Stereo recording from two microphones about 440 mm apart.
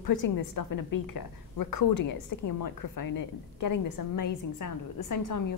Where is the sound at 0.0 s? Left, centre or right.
Left.